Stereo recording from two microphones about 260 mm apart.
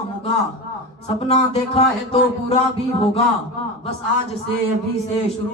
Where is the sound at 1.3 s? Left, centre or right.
Left.